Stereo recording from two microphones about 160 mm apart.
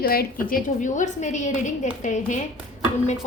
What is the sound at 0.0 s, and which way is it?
Speech, 65° left (ahead or behind).